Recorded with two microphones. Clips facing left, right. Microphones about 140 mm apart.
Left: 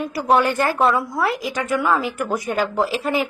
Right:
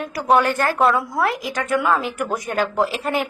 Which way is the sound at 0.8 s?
Centre (ahead or behind).